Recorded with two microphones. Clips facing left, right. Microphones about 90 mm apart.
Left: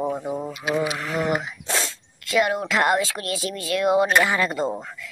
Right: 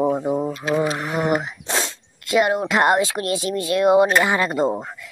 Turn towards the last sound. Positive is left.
turn(degrees=-20)  # may be behind; listen again after turning